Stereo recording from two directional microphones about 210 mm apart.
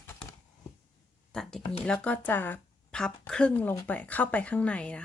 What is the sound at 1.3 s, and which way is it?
Speech, 5° left (ahead or behind).